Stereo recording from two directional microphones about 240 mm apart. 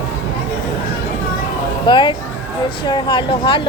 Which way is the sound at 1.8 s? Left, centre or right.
Centre.